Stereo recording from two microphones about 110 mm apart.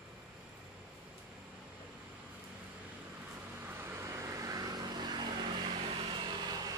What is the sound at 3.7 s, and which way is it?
Vehicle, 25° right (ahead or behind).